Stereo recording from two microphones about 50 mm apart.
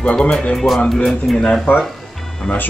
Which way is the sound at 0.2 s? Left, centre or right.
Centre.